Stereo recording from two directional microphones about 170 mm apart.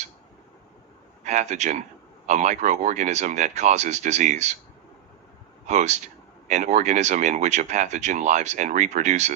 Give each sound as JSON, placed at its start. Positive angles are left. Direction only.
{"t": 1.2, "sound": "speech", "side_deg": -45}
{"t": 5.6, "sound": "speech", "side_deg": -45}